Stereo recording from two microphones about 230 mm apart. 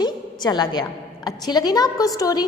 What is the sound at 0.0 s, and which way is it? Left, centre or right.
A woman's voice, centre.